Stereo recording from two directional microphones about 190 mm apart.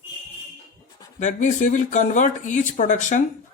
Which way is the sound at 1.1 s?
40° left (ahead or behind).